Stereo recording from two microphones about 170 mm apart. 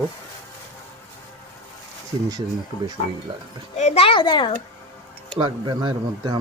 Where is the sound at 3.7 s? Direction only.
40° left (ahead or behind).